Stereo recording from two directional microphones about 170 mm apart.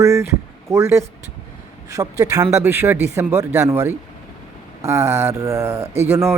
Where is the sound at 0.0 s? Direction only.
15° right (ahead or behind).